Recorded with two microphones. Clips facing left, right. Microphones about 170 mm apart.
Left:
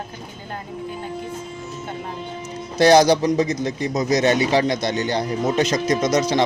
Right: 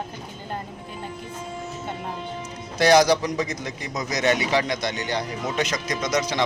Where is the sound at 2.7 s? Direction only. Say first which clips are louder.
Left 3 dB; 30° left (ahead or behind).